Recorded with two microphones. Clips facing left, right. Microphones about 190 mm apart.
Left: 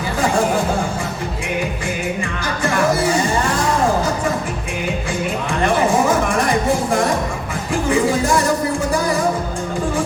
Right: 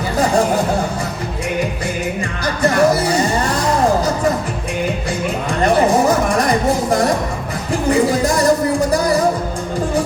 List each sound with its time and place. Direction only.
2.6 s music: 40° right (ahead or behind)
5.6 s music: 40° right (ahead or behind)